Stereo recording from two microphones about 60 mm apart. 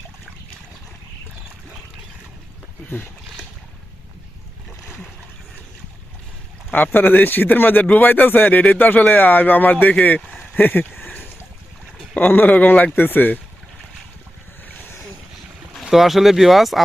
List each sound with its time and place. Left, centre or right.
6.7 s speech: left
10.5 s a sound: left
12.1 s speech: left
15.8 s speech: centre